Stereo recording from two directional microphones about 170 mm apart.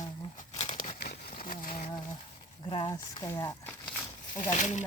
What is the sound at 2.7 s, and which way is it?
Speech, 30° left (ahead or behind).